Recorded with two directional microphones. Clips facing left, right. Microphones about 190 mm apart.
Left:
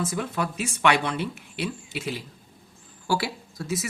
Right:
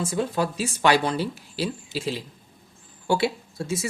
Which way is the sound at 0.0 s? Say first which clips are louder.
Right 3 dB; 30° right (ahead or behind).